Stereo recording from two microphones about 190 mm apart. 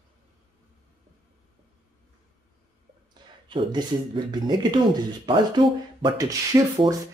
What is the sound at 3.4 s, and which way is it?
Speech, 25° right (ahead or behind).